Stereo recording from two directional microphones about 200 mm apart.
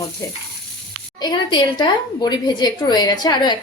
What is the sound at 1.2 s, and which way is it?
A woman's voice, 20° left (ahead or behind).